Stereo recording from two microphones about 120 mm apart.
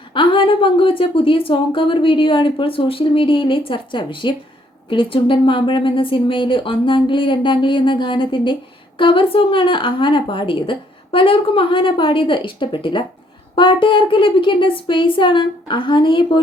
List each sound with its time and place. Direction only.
0.1 s a woman's voice: 45° left (ahead or behind)